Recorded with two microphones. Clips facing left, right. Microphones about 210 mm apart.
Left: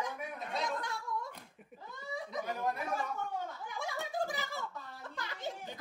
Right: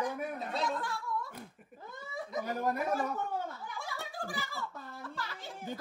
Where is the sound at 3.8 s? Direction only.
20° left (ahead or behind).